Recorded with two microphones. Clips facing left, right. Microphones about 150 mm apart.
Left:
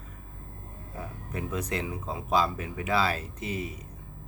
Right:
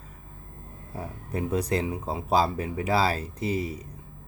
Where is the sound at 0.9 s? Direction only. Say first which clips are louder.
Right 5 dB; 35° right (ahead or behind).